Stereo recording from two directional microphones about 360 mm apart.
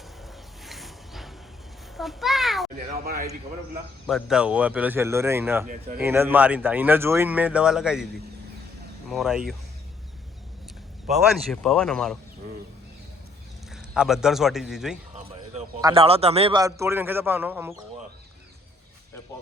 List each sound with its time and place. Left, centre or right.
0.6 s music: centre
2.0 s a sound: centre
4.0 s speech: centre
5.6 s speech: right
6.0 s speech: centre
9.0 s speech: centre
11.1 s speech: centre
13.7 s speech: centre
15.1 s a man's voice: centre